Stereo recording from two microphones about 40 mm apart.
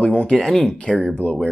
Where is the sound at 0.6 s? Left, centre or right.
Left.